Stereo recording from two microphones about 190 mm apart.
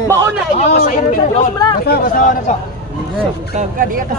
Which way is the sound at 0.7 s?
45° left (ahead or behind).